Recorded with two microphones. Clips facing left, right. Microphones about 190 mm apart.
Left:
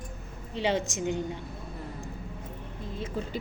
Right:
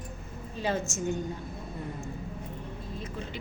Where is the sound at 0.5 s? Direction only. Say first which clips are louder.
Left 3 dB; 90° left.